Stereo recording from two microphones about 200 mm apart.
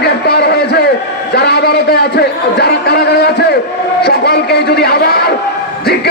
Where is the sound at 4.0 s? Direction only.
55° left (ahead or behind).